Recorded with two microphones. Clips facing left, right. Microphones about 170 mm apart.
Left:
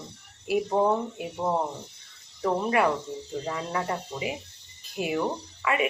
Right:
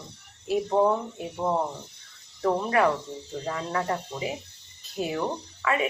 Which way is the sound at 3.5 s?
20° left (ahead or behind).